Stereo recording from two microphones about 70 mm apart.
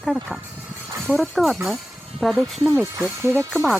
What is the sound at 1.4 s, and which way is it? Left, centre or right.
Speech, centre.